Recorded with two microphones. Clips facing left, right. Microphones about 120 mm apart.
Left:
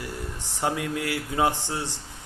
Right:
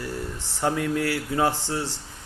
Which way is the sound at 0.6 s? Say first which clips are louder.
Right 3 dB; 20° left (ahead or behind).